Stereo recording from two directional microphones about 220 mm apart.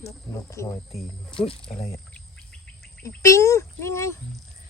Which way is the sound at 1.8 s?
15° left (ahead or behind).